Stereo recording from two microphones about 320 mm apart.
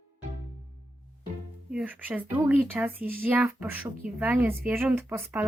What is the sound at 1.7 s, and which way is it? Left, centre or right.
Speech, centre.